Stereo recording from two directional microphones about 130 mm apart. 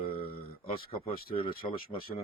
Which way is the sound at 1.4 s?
45° left (ahead or behind).